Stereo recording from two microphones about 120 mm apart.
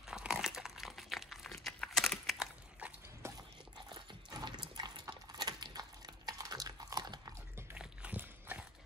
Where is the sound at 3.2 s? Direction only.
20° right (ahead or behind).